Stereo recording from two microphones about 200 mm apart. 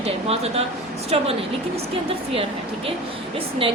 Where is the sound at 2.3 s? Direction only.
30° right (ahead or behind).